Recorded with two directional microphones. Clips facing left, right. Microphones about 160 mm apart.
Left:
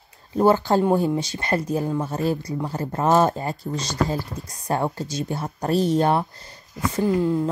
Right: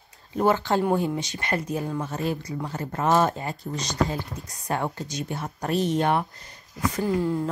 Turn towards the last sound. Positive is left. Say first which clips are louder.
# left 4 dB
turn(degrees=20)  # may be behind; listen again after turning